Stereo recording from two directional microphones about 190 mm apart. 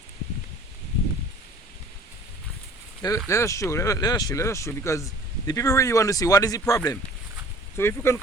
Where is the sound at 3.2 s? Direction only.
15° left (ahead or behind).